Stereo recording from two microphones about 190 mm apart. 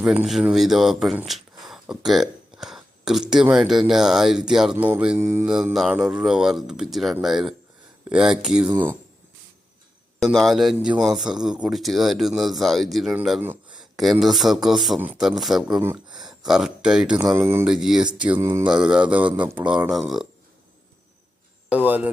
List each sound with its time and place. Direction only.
0.0 s speech: 5° right (ahead or behind)
5.5 s speech: 5° right (ahead or behind)
10.2 s speech: centre (ahead or behind)
18.3 s speech: 15° right (ahead or behind)
21.7 s speech: 10° right (ahead or behind)